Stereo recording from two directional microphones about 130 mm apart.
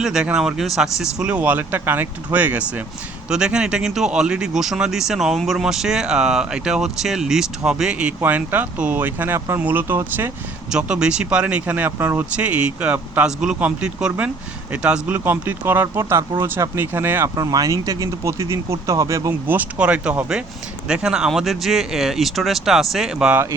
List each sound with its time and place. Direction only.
0.0 s speech: 5° right (ahead or behind)
10.7 s speech: 5° right (ahead or behind)